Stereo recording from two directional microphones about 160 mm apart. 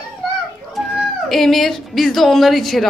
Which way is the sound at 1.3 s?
Centre (ahead or behind).